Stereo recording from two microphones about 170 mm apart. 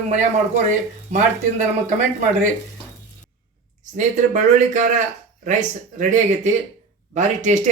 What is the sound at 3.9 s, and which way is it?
Speech, 50° right (ahead or behind).